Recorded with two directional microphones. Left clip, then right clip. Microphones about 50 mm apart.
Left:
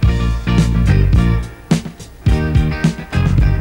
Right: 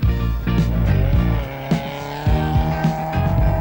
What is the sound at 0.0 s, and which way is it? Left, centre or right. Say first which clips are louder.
Music: left 5 dB; left.